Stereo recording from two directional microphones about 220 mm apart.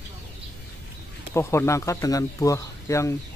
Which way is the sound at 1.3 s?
10° left (ahead or behind).